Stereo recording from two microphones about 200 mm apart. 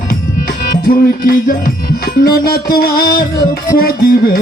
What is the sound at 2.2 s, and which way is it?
Music, 50° left (ahead or behind).